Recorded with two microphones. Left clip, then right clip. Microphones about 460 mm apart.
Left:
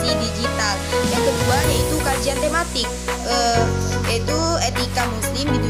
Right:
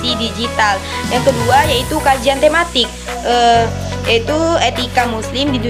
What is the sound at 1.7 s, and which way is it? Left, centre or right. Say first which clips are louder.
Music: right 7 dB; left.